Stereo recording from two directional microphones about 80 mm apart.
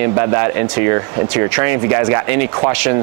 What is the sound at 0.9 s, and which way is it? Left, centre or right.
Speech, right.